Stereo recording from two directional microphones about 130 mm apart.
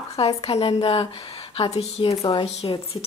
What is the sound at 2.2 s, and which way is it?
Speech, 45° left (ahead or behind).